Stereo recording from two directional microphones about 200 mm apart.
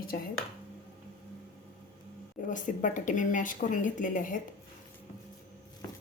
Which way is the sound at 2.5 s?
40° left (ahead or behind).